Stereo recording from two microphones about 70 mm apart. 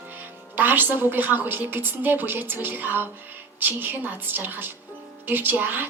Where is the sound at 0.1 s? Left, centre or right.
Right.